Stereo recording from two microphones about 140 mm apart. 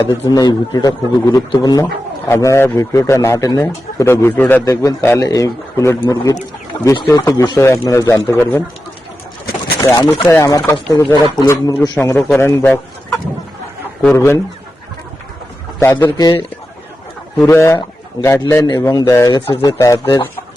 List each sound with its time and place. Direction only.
0.1 s speech: 30° left (ahead or behind)
4.6 s speech: 25° left (ahead or behind)
6.7 s speech: 35° left (ahead or behind)
7.1 s speech: 25° left (ahead or behind)
9.8 s speech: 20° left (ahead or behind)
15.8 s a man's voice: 15° left (ahead or behind)
17.4 s speech: 20° left (ahead or behind)